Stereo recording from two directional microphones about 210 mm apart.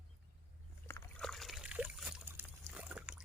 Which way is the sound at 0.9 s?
5° left (ahead or behind).